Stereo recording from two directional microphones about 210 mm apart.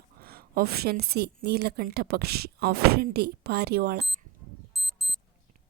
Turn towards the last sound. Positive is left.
turn(degrees=0)  # may be behind; listen again after turning